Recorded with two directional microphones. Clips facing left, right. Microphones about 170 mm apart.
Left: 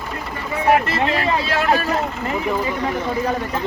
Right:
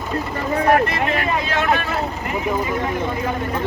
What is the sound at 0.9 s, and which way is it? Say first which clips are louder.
Speech: left 1 dB; 30° left (ahead or behind).